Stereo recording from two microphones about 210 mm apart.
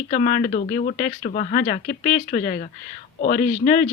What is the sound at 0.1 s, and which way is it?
Speech, 35° left (ahead or behind).